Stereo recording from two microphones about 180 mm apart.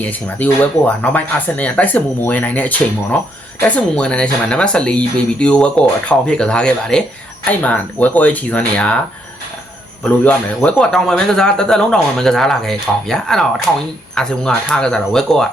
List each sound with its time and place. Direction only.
0.0 s speech: 10° left (ahead or behind)
10.0 s speech: 10° left (ahead or behind)